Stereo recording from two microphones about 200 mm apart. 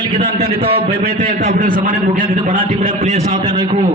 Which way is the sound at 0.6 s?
30° right (ahead or behind).